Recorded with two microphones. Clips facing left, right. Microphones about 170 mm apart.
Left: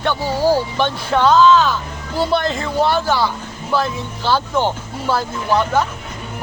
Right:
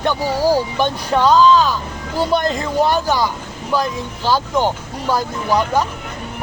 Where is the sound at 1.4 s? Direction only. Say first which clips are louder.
Left 1 dB; 35° right (ahead or behind).